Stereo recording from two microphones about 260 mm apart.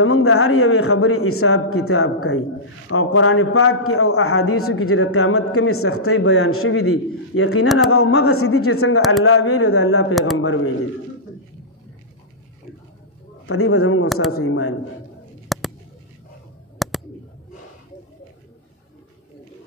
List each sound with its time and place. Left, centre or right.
0.0 s a man's voice: left
7.6 s speech: centre
7.9 s a man's voice: left
13.5 s speech: left
15.4 s a sound: centre
16.7 s a sound: centre